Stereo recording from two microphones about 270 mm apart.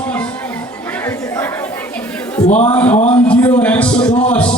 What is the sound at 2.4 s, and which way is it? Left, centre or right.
Speech, left.